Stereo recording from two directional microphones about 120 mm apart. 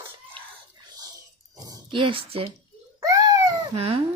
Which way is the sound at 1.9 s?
45° right (ahead or behind).